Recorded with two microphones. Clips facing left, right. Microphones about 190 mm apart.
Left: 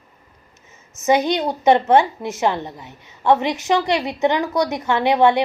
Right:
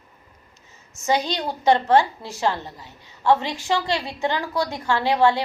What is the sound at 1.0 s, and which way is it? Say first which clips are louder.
A woman's voice: left 6 dB; 20° left (ahead or behind).